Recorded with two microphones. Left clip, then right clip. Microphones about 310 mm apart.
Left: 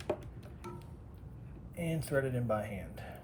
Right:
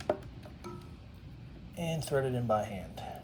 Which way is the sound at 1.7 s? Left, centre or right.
Right.